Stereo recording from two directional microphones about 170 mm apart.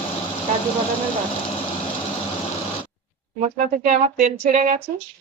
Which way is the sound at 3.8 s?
50° right (ahead or behind).